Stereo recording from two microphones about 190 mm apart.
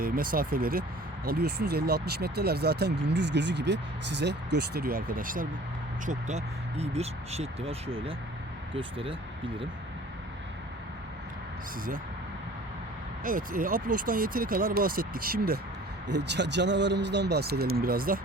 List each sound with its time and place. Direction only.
0.0 s speech: 50° right (ahead or behind); by 9.1 s 30° right (ahead or behind)
13.2 s speech: 45° right (ahead or behind)
16.1 s speech: 65° right (ahead or behind); by 18.2 s 50° right (ahead or behind)